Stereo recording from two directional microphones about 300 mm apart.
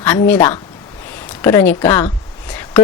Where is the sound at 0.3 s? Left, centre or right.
Centre.